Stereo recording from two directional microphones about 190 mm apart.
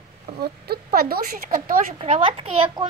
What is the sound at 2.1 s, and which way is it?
Speech, 30° right (ahead or behind).